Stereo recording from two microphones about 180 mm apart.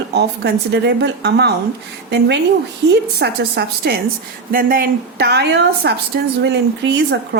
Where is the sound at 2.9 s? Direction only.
60° right (ahead or behind).